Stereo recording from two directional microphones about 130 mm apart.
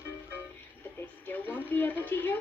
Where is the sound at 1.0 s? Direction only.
15° left (ahead or behind).